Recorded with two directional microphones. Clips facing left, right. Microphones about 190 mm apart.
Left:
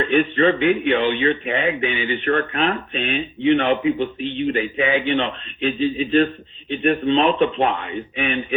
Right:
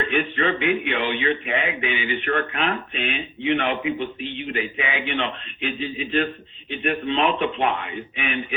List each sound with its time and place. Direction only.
0.1 s speech: 35° left (ahead or behind)